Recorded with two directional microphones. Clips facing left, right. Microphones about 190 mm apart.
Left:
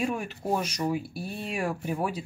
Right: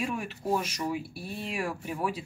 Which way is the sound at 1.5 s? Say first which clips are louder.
Left 5 dB; 40° left (ahead or behind).